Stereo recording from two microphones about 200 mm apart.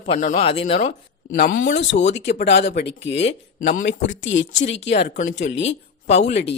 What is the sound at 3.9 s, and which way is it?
Speech, 70° left (ahead or behind).